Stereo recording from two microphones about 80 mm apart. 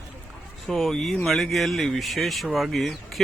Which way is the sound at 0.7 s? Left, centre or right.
Centre.